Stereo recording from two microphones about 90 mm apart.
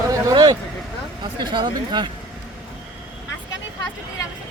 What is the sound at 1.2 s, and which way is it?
Speech, 60° right (ahead or behind).